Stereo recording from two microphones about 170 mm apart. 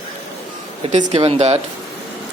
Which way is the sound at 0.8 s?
40° right (ahead or behind).